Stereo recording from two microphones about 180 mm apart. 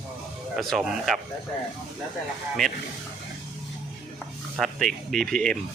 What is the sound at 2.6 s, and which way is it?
Speech, 5° left (ahead or behind).